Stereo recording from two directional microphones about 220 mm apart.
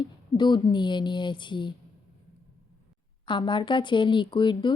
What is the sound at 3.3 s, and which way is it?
A woman's voice, 20° left (ahead or behind).